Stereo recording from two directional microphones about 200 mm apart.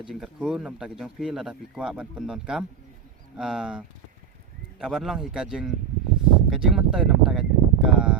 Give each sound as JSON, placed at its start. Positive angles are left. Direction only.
{"t": 0.1, "sound": "speech", "side_deg": 0}